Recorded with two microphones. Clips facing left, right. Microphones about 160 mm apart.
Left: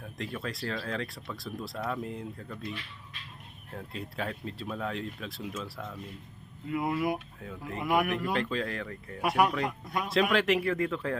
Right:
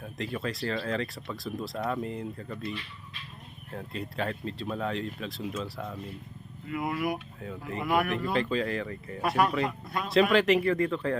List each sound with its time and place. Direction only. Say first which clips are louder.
0.0 s speech: right 3 dB; centre (ahead or behind)
6.7 s speech: left 1 dB; 20° left (ahead or behind)
7.3 s speech: right 2 dB; centre (ahead or behind)
9.8 s speech: even; 15° left (ahead or behind)
10.1 s speech: right 4 dB; centre (ahead or behind)